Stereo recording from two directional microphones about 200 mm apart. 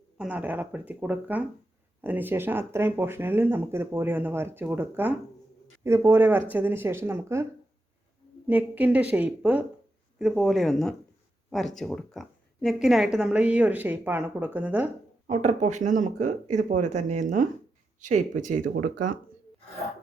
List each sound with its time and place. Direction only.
0.2 s speech: 5° right (ahead or behind)
8.4 s speech: 10° right (ahead or behind)
15.3 s speech: 35° right (ahead or behind)